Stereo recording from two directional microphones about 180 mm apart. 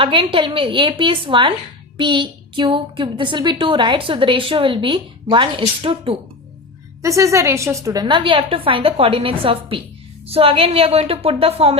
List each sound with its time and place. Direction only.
0.0 s a woman's voice: 30° right (ahead or behind)
7.0 s a woman's voice: 15° right (ahead or behind); by 11.8 s 35° right (ahead or behind)